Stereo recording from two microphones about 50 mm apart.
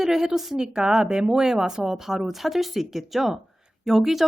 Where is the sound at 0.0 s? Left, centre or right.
Centre.